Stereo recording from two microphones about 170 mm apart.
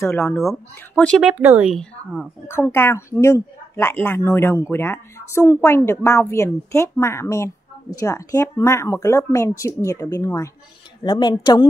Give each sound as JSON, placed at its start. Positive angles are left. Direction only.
{"t": 0.0, "sound": "speech", "side_deg": 15}
{"t": 0.4, "sound": "speech", "side_deg": 5}
{"t": 1.2, "sound": "speech", "side_deg": -10}
{"t": 2.4, "sound": "speech", "side_deg": 15}